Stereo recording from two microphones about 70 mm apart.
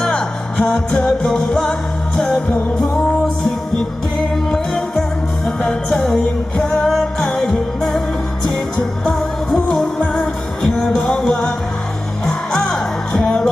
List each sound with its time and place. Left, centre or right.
0.0 s music: centre